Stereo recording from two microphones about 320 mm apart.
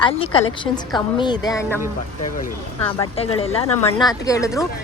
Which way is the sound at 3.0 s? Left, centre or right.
Centre.